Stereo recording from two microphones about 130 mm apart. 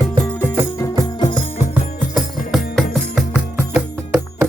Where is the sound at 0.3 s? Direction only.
15° left (ahead or behind).